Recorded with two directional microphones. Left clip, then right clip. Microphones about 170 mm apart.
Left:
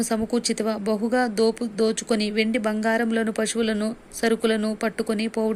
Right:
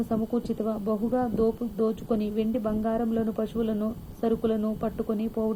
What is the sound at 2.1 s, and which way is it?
Speech, 5° right (ahead or behind).